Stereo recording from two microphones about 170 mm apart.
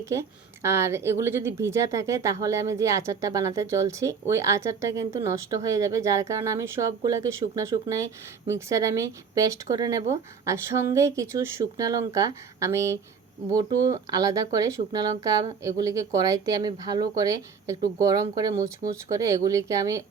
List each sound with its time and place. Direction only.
0.0 s a woman's voice: 15° right (ahead or behind)